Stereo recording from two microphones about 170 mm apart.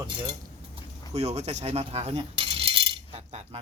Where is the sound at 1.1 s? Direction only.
40° right (ahead or behind).